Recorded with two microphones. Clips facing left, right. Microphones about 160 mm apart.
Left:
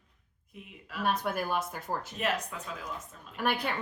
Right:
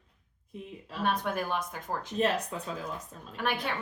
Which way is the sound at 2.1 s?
30° right (ahead or behind).